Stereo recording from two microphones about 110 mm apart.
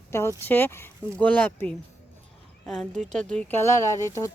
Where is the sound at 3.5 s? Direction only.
25° left (ahead or behind).